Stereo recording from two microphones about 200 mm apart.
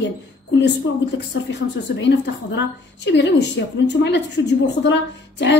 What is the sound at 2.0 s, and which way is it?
A woman's voice, 60° left (ahead or behind).